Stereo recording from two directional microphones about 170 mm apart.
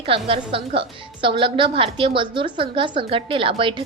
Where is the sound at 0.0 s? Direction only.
35° right (ahead or behind).